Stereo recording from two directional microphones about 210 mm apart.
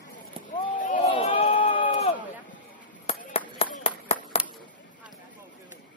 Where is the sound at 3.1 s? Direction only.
30° left (ahead or behind).